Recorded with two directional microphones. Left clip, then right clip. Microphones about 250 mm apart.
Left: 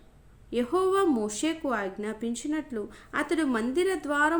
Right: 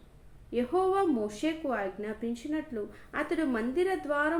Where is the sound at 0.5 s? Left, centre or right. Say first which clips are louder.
Left 2 dB; left.